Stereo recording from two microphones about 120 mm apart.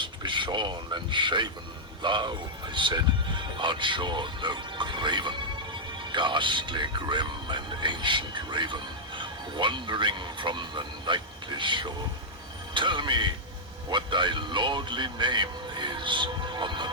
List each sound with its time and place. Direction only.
0.0 s speech: 40° right (ahead or behind)